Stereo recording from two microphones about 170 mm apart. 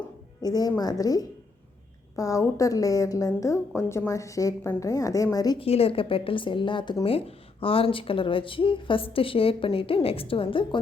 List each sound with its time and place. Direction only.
0.4 s a woman's voice: 25° left (ahead or behind)
5.6 s speech: 35° left (ahead or behind)